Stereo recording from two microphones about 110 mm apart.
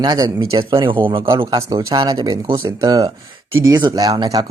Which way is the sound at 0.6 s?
45° right (ahead or behind).